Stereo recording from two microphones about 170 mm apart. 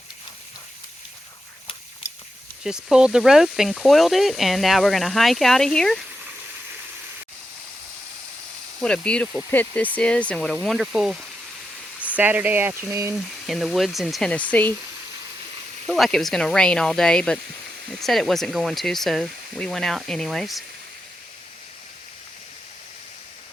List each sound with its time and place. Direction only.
2.6 s speech: 5° right (ahead or behind)
8.8 s speech: 5° left (ahead or behind); by 13.1 s 15° right (ahead or behind)
13.1 s speech: centre (ahead or behind)
15.9 s speech: centre (ahead or behind)